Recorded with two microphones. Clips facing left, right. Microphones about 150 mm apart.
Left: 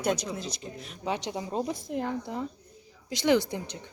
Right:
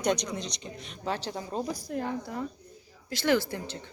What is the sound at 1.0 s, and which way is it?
Speech, 15° left (ahead or behind).